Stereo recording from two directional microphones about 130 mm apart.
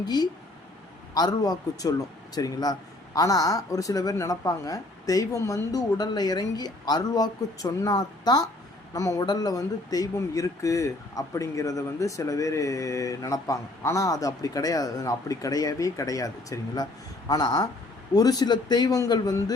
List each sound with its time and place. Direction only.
0.0 s speech: 30° left (ahead or behind)